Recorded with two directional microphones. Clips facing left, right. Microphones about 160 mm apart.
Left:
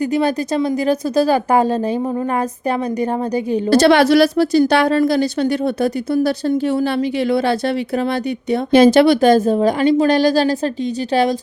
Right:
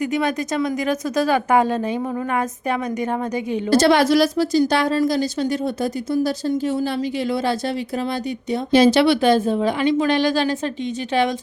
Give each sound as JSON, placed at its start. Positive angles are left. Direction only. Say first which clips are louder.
{"t": 0.0, "sound": "a woman's voice", "louder": "left 4 dB", "side_deg": 35}
{"t": 3.7, "sound": "a woman's voice", "louder": "left 4 dB", "side_deg": 70}